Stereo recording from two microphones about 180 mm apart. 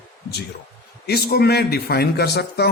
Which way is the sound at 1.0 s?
60° left (ahead or behind).